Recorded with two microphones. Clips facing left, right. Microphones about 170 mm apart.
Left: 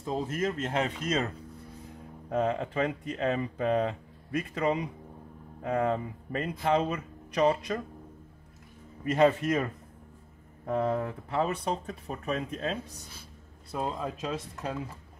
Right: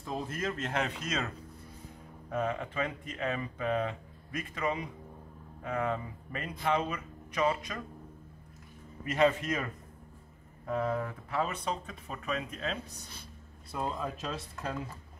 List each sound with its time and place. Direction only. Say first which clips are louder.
0.0 s speech: left 5 dB; 20° left (ahead or behind)
9.0 s speech: left 4 dB; 30° left (ahead or behind)
13.7 s speech: left 2 dB; 20° left (ahead or behind)